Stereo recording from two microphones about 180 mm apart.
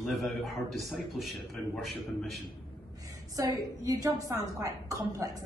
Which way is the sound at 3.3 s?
20° right (ahead or behind).